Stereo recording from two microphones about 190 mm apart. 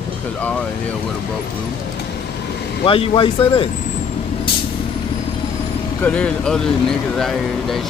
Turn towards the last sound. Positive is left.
turn(degrees=0)  # may be behind; listen again after turning